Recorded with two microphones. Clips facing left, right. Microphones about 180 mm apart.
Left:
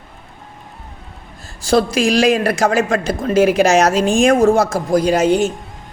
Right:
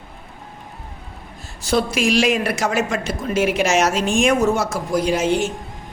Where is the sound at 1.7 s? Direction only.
35° left (ahead or behind).